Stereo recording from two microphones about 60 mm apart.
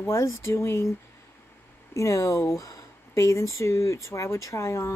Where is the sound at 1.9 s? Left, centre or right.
Left.